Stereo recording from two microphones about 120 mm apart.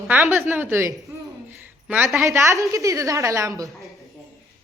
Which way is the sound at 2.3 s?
25° right (ahead or behind).